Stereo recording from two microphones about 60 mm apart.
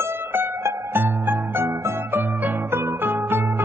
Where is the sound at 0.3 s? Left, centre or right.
Right.